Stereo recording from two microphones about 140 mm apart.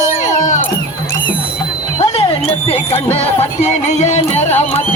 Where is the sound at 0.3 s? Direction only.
60° left (ahead or behind).